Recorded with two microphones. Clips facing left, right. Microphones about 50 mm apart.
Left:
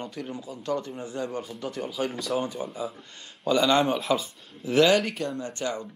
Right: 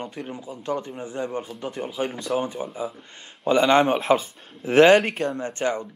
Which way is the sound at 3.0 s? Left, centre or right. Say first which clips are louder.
Right 3 dB; right.